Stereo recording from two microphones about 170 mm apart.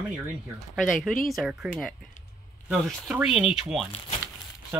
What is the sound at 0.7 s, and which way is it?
Speech, centre (ahead or behind).